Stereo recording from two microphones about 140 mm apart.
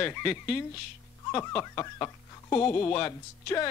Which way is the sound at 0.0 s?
15° left (ahead or behind).